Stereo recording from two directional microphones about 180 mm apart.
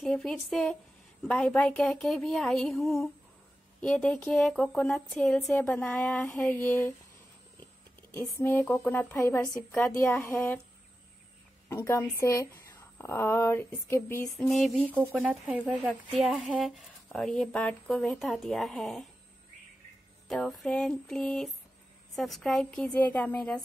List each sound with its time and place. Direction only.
0.0 s a woman's voice: 5° left (ahead or behind)
8.1 s a woman's voice: 15° left (ahead or behind)
11.7 s a woman's voice: 15° left (ahead or behind)
14.4 s speech: centre (ahead or behind)
20.2 s speech: centre (ahead or behind)